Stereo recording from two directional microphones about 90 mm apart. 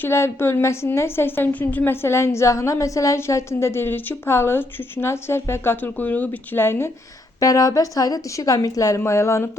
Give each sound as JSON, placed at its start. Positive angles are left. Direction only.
{"t": 0.0, "sound": "a woman's voice", "side_deg": 30}
{"t": 7.3, "sound": "speech", "side_deg": 40}